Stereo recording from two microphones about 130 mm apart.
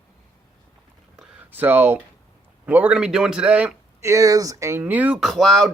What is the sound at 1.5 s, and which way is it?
A man's voice, 15° right (ahead or behind).